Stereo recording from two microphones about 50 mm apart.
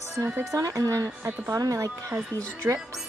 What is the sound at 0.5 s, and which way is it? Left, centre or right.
Speech, right.